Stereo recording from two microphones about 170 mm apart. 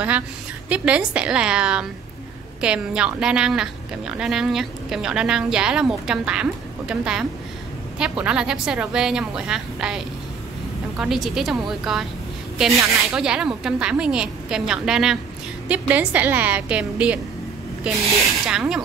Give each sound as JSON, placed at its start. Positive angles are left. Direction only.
{"t": 0.7, "sound": "a woman's voice", "side_deg": -5}